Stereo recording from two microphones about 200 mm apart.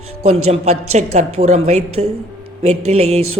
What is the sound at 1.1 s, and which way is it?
Speech, 35° right (ahead or behind).